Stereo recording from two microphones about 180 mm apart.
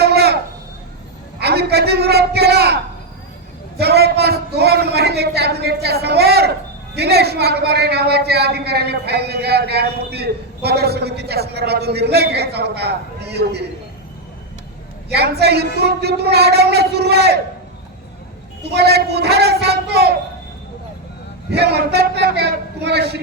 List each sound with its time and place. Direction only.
0.0 s a sound: 65° right (ahead or behind)
1.4 s a man's voice: 65° right (ahead or behind)
3.8 s a man's voice: 65° right (ahead or behind)
15.1 s a man's voice: 65° right (ahead or behind)
18.6 s a man's voice: 65° right (ahead or behind)
21.5 s a man's voice: 65° right (ahead or behind)